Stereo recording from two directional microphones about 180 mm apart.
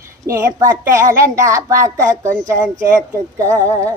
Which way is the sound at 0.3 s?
20° right (ahead or behind).